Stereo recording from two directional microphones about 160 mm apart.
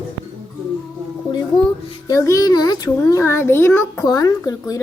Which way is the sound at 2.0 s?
20° left (ahead or behind).